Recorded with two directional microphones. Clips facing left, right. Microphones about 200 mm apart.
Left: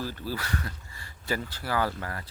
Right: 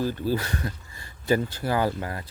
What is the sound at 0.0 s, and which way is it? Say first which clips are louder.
Speech: right 8 dB; 20° right (ahead or behind).